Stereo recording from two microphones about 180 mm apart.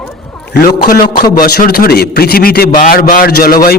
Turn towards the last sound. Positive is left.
turn(degrees=55)  # may be behind; listen again after turning